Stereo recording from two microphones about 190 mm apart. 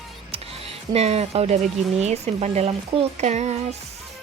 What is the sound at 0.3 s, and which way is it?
Music, 30° right (ahead or behind).